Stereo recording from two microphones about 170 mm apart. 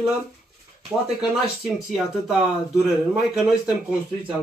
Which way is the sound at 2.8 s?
5° right (ahead or behind).